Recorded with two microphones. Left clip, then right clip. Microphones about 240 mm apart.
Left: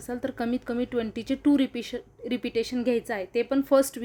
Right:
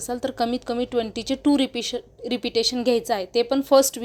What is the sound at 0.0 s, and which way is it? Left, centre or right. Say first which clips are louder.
A woman's voice: right 6 dB; centre.